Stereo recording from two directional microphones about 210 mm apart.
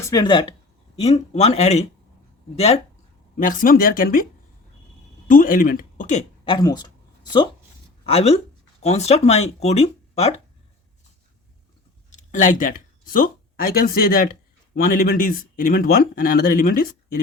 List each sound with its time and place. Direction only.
0.0 s speech: 15° left (ahead or behind); by 4.3 s 45° left (ahead or behind)
5.3 s speech: 40° left (ahead or behind)
12.1 s speech: 35° left (ahead or behind)